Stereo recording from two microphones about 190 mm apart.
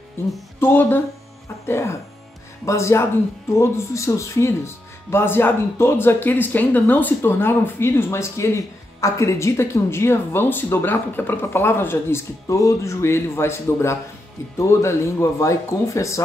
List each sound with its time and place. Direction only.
0.2 s speech: 15° left (ahead or behind)